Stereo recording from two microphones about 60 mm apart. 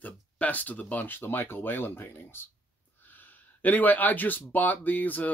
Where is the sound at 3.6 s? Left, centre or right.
Left.